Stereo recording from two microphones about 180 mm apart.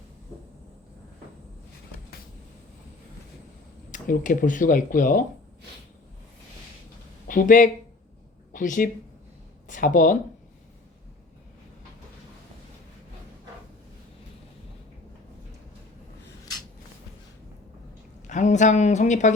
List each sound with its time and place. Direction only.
3.9 s speech: 45° left (ahead or behind)
7.3 s speech: 45° left (ahead or behind)
18.3 s a woman's voice: 40° left (ahead or behind)